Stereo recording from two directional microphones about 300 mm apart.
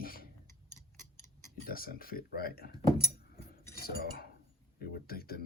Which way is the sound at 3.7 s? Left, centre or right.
Left.